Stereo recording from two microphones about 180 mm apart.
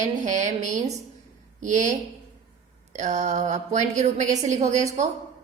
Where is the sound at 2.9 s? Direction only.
40° right (ahead or behind).